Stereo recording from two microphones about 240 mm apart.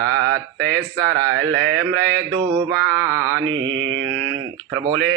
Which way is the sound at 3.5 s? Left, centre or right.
Right.